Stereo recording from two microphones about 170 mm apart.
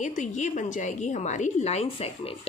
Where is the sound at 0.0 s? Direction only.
45° left (ahead or behind).